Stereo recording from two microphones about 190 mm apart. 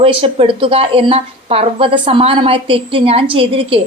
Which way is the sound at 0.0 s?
30° right (ahead or behind).